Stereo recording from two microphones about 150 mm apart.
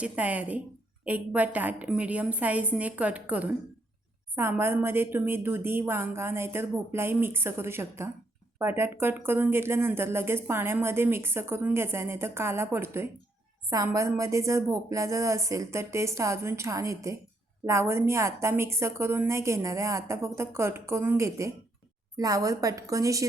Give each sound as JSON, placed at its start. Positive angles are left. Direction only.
{"t": 0.0, "sound": "a woman's voice", "side_deg": -10}